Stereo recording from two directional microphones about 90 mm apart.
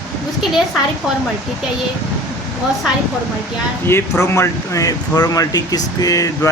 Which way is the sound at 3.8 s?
30° left (ahead or behind).